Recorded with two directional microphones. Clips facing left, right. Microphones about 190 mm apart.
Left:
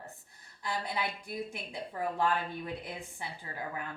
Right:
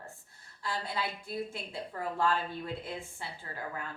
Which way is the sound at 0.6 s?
20° left (ahead or behind).